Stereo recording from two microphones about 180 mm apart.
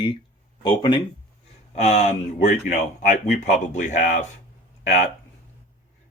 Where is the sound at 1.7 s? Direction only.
40° left (ahead or behind).